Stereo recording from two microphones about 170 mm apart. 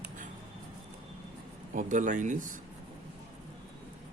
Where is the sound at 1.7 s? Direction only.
50° right (ahead or behind).